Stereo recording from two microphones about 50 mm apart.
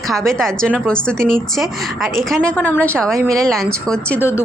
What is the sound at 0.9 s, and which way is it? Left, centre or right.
Speech, centre.